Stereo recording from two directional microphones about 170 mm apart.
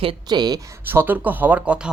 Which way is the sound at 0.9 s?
10° right (ahead or behind).